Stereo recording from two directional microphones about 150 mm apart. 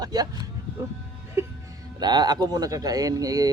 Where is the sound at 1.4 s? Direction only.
20° right (ahead or behind).